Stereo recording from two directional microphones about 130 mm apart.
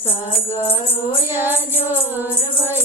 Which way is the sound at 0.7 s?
45° left (ahead or behind).